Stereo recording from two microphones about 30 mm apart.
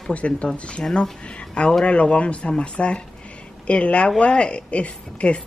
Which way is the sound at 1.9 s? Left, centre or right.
Left.